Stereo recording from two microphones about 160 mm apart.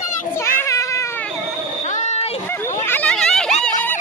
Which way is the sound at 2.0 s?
45° left (ahead or behind).